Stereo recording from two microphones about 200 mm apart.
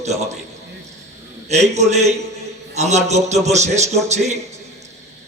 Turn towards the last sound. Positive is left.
turn(degrees=-35)  # may be behind; listen again after turning